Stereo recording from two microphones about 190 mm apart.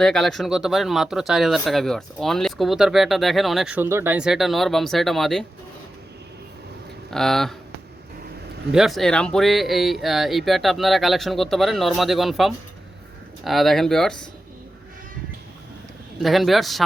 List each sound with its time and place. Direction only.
0.0 s speech: centre (ahead or behind)
7.1 s speech: centre (ahead or behind)
8.7 s speech: centre (ahead or behind)
16.2 s speech: centre (ahead or behind)